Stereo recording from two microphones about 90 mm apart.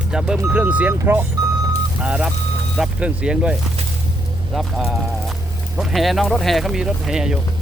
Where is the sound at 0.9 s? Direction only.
25° right (ahead or behind).